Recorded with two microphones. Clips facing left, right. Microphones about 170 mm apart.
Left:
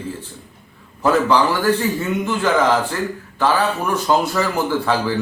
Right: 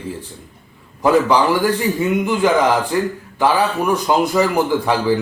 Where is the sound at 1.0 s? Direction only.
15° right (ahead or behind).